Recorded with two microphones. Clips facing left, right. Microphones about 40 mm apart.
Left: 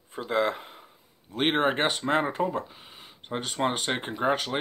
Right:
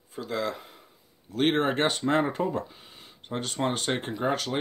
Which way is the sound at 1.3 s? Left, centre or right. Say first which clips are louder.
Even; centre.